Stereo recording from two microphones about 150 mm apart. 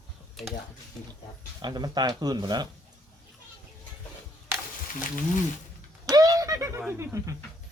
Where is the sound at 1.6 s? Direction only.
30° right (ahead or behind).